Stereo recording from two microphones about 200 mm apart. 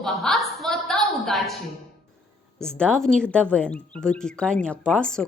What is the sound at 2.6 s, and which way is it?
Speech, 5° left (ahead or behind).